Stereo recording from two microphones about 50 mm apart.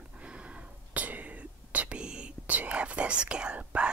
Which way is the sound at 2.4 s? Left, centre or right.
Right.